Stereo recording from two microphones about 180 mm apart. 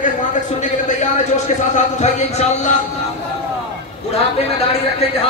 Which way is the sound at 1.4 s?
40° left (ahead or behind).